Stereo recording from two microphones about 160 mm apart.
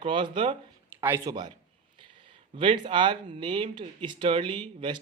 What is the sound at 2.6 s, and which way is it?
Speech, 30° right (ahead or behind).